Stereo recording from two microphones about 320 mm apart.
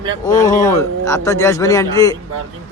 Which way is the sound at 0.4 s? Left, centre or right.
Centre.